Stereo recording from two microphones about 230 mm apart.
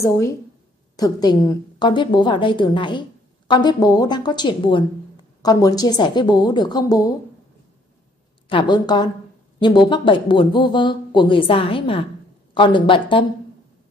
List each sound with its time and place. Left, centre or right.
0.9 s a woman's voice: centre
8.5 s a woman's voice: left